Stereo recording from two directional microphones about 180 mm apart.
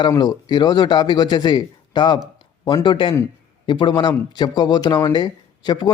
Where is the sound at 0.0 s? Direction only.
25° left (ahead or behind).